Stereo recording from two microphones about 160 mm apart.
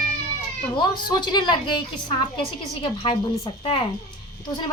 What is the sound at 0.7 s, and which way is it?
A woman's voice, 30° left (ahead or behind).